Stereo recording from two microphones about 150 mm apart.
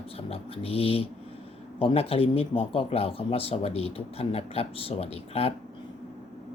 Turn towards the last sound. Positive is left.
turn(degrees=40)  # may be behind; listen again after turning